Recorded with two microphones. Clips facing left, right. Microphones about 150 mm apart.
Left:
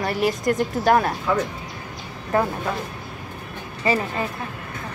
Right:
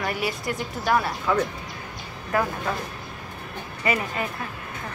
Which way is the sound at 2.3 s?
30° left (ahead or behind).